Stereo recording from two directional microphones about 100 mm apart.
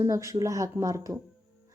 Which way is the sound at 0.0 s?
30° right (ahead or behind).